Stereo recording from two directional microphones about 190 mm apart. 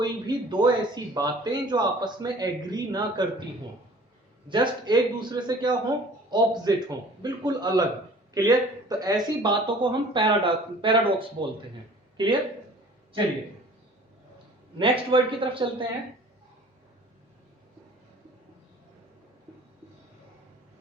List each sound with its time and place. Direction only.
0.0 s speech: 25° right (ahead or behind)
4.4 s speech: 25° right (ahead or behind)
14.8 s speech: 25° right (ahead or behind)